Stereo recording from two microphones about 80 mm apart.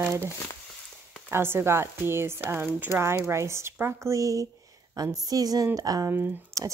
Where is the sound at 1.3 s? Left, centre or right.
Right.